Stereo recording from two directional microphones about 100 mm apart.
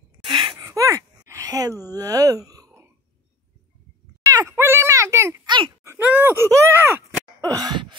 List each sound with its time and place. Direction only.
0.2 s gasp: 50° right (ahead or behind)
2.0 s speech: 35° right (ahead or behind)
4.3 s a sound: 30° right (ahead or behind)
5.9 s speech: 20° right (ahead or behind)
7.4 s gasp: 40° right (ahead or behind)